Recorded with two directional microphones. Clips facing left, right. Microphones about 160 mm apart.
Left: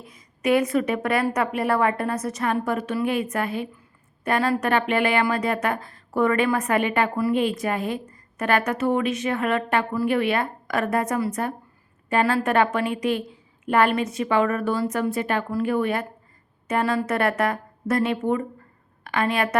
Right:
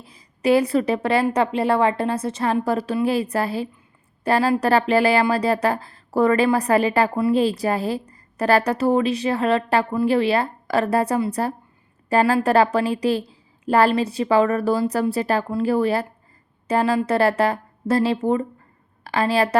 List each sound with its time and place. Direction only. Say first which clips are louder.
0.0 s a woman's voice: right 3 dB; 30° right (ahead or behind)